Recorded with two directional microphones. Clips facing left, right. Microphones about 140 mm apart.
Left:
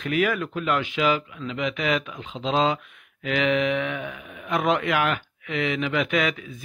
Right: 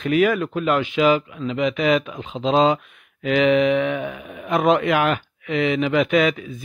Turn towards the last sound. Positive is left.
turn(degrees=-25)  # may be behind; listen again after turning